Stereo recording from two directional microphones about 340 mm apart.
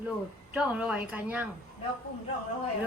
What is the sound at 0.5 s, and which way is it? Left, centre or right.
Speech, centre.